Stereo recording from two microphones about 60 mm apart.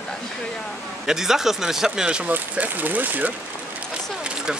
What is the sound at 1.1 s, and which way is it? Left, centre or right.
Speech, centre.